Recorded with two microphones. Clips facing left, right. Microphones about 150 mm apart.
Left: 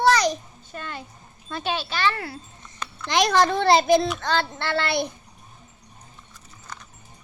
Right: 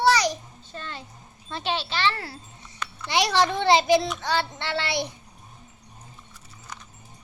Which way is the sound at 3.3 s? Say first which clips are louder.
Left 2 dB; 40° left (ahead or behind).